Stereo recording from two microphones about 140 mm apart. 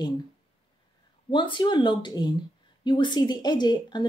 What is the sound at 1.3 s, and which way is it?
Speech, 35° left (ahead or behind).